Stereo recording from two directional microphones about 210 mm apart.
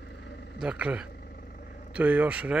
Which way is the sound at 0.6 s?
5° right (ahead or behind).